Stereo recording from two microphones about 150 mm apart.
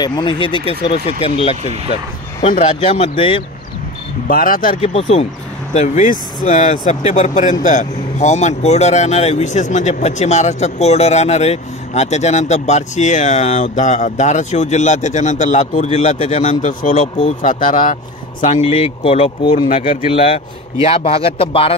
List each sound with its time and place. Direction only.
0.0 s speech: 30° left (ahead or behind)
3.2 s speech: 35° left (ahead or behind)
4.3 s speech: 70° left (ahead or behind)
4.7 s speech: 40° left (ahead or behind); by 17.9 s 60° left (ahead or behind)
18.7 s speech: 35° left (ahead or behind)